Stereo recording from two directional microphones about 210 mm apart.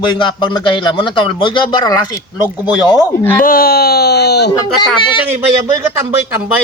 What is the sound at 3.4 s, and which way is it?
Speech, 45° left (ahead or behind).